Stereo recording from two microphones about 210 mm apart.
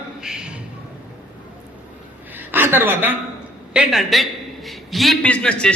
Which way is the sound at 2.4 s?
10° right (ahead or behind).